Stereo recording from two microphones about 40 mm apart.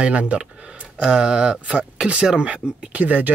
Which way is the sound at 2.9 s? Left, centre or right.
Right.